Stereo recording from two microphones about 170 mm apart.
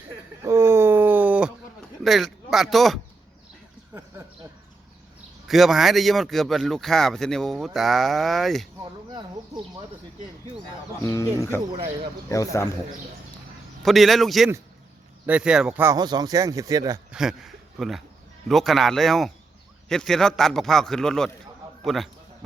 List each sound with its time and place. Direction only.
0.4 s a sound: 15° right (ahead or behind)
2.0 s speech: centre (ahead or behind)
5.5 s speech: centre (ahead or behind)
11.0 s a man's voice: 15° left (ahead or behind)
13.8 s speech: centre (ahead or behind); by 17.0 s 20° right (ahead or behind)
17.1 s speech: 5° right (ahead or behind)